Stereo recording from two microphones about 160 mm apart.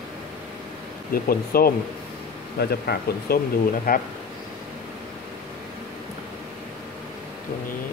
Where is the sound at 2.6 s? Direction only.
80° left.